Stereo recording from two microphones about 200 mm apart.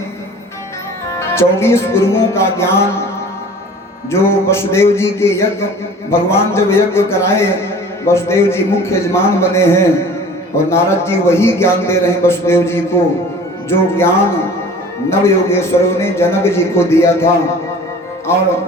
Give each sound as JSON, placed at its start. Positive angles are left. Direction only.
{"t": 1.2, "sound": "a man's voice", "side_deg": 15}
{"t": 4.1, "sound": "a man's voice", "side_deg": 15}
{"t": 15.1, "sound": "a man's voice", "side_deg": 10}